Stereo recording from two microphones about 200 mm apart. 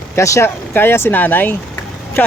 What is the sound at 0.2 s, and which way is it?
Speech, 15° left (ahead or behind).